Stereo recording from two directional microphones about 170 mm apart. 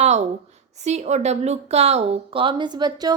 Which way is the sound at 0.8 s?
40° right (ahead or behind).